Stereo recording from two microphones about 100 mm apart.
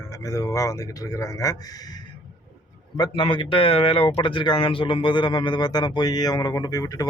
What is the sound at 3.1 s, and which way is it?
Speech, 60° left (ahead or behind).